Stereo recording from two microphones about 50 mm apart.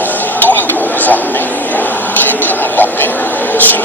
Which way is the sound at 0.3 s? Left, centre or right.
Left.